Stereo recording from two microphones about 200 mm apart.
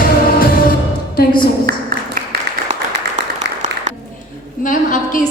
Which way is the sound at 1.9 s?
45° right (ahead or behind).